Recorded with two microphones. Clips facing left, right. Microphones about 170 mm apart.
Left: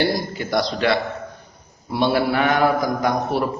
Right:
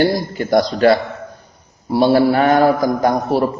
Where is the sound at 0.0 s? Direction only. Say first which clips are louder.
Right 5 dB; 45° right (ahead or behind).